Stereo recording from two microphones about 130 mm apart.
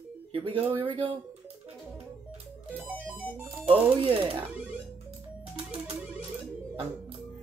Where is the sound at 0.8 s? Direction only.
40° right (ahead or behind).